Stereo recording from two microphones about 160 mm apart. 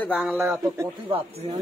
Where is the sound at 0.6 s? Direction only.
20° right (ahead or behind).